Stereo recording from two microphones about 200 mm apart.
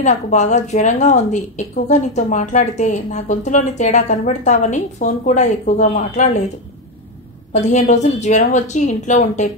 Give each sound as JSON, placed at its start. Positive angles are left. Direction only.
{"t": 0.0, "sound": "a woman's voice", "side_deg": 35}
{"t": 7.5, "sound": "a woman's voice", "side_deg": 35}